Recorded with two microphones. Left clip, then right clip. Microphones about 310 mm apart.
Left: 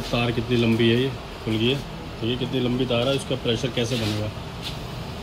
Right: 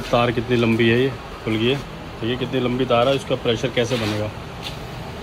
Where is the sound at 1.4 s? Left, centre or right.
Centre.